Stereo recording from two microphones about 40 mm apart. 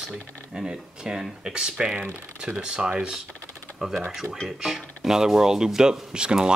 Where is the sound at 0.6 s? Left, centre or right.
Centre.